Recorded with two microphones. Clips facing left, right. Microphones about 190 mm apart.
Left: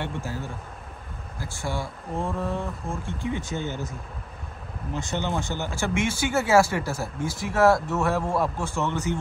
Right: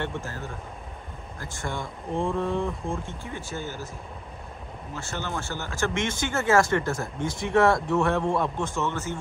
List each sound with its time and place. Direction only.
0.0 s speech: 10° left (ahead or behind)
1.4 s speech: 5° left (ahead or behind)
3.1 s speech: 15° left (ahead or behind)
4.9 s speech: 15° left (ahead or behind)